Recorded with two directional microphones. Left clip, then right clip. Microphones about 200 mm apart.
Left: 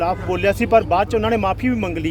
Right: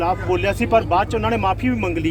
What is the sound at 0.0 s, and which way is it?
Speech, 55° left (ahead or behind).